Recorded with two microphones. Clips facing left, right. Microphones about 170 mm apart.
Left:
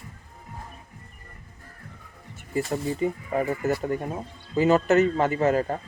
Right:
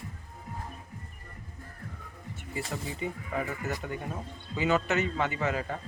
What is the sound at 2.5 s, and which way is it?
A man's voice, 40° left (ahead or behind).